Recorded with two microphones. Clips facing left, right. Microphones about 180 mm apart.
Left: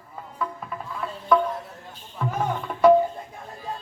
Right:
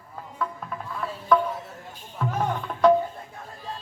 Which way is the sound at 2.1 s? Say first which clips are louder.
Even; 5° left (ahead or behind).